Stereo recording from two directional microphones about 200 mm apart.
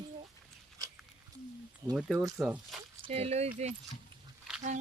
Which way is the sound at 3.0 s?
30° right (ahead or behind).